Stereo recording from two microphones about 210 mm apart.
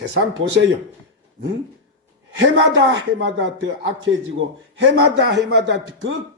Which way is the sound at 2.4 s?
60° right (ahead or behind).